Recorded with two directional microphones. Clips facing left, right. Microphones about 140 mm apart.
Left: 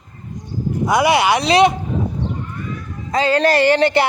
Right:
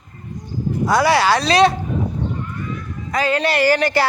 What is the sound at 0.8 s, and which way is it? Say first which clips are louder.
Speech: left 1 dB; 20° left (ahead or behind).